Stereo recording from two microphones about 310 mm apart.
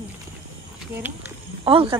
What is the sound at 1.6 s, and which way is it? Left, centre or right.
Speech, centre.